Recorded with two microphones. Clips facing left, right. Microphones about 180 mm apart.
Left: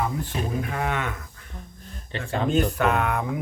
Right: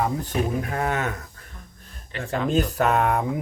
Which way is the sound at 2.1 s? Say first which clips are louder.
Even; 30° left (ahead or behind).